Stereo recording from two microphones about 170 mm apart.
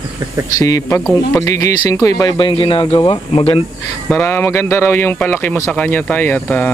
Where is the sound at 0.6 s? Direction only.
20° left (ahead or behind); by 3.6 s 35° left (ahead or behind).